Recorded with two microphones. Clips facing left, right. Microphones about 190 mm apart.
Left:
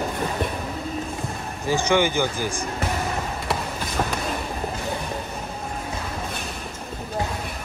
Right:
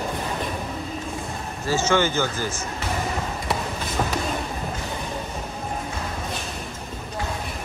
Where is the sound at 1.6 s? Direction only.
15° left (ahead or behind).